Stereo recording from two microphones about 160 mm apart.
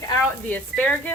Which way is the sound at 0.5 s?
10° left (ahead or behind).